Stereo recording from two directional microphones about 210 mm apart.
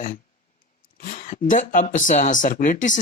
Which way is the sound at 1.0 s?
40° left (ahead or behind).